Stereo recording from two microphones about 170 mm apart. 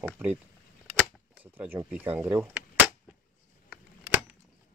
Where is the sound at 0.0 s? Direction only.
10° right (ahead or behind).